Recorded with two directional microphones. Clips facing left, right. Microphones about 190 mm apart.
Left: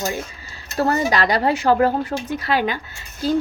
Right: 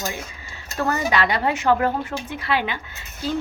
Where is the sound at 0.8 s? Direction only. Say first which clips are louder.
Left 3 dB; 35° left (ahead or behind).